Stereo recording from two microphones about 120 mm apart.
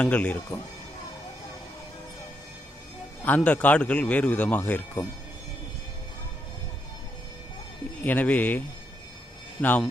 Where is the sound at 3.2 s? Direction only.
10° left (ahead or behind).